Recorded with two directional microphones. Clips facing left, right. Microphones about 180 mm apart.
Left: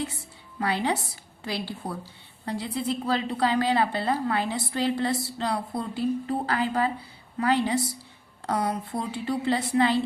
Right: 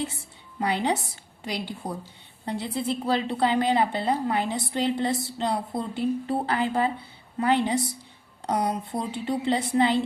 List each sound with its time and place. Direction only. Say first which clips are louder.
0.6 s a woman's voice: right 1 dB; 20° right (ahead or behind)